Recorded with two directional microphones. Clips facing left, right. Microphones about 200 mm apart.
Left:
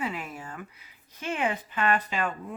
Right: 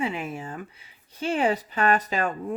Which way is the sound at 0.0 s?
25° right (ahead or behind).